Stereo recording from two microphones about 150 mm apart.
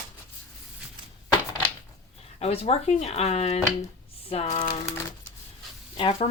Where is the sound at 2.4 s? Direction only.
45° left (ahead or behind).